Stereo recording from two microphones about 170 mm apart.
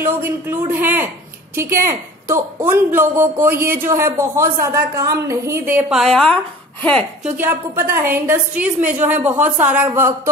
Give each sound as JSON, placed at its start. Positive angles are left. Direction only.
{"t": 0.0, "sound": "a woman's voice", "side_deg": -15}
{"t": 7.3, "sound": "a woman's voice", "side_deg": -15}